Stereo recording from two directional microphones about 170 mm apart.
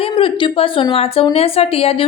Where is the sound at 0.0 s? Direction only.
30° left (ahead or behind).